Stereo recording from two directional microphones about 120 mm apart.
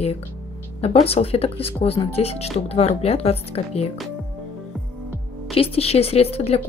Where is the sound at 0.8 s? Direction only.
55° left (ahead or behind).